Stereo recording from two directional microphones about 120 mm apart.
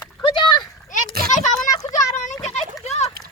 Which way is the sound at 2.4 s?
65° left (ahead or behind).